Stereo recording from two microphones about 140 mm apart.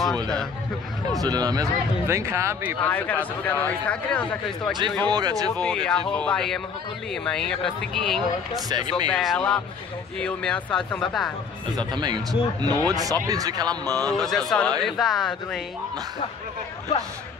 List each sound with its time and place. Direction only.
1.2 s speech: 25° right (ahead or behind)
2.8 s speech: 10° left (ahead or behind)
5.1 s speech: 30° right (ahead or behind)
5.6 s speech: 10° left (ahead or behind)
8.6 s speech: 30° right (ahead or behind)
9.2 s speech: 5° left (ahead or behind)
11.9 s speech: 30° right (ahead or behind)
14.0 s speech: 5° left (ahead or behind)